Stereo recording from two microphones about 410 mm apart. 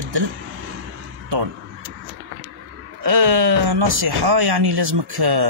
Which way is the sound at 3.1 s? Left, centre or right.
Right.